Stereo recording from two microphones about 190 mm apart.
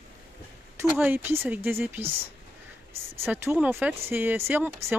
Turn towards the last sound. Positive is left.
turn(degrees=-10)  # may be behind; listen again after turning